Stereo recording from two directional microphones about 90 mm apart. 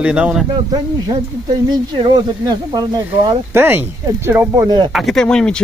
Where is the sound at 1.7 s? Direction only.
50° right (ahead or behind).